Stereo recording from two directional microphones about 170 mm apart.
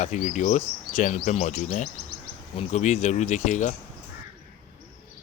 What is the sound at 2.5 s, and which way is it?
Speech, 35° left (ahead or behind).